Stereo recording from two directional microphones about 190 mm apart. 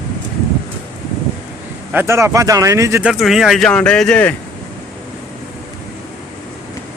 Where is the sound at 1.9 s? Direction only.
10° right (ahead or behind).